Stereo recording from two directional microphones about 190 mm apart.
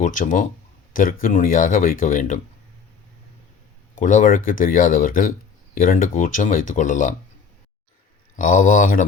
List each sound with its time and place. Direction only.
0.0 s speech: 45° left (ahead or behind)
4.0 s speech: 40° left (ahead or behind)
8.4 s speech: 45° left (ahead or behind)